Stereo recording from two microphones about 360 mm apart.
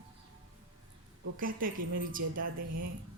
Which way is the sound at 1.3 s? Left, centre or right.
Right.